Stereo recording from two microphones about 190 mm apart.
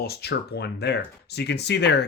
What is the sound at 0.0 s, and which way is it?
Speech, 55° left (ahead or behind).